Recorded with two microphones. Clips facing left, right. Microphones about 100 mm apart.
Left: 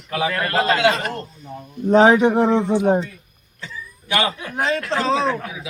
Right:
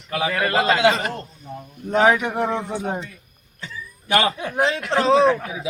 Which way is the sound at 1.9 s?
25° left (ahead or behind).